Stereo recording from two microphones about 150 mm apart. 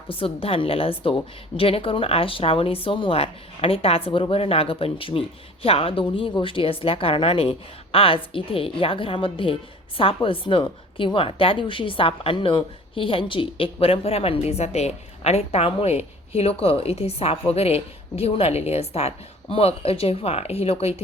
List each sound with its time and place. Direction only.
0.1 s a woman's voice: 40° left (ahead or behind)